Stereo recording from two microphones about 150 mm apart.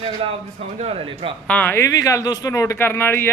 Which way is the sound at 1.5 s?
10° left (ahead or behind).